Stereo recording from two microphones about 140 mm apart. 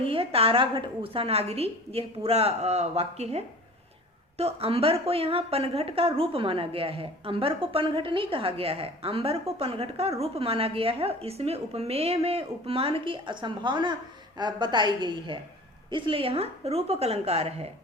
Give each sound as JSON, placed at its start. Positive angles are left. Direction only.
{"t": 0.1, "sound": "a woman's voice", "side_deg": -40}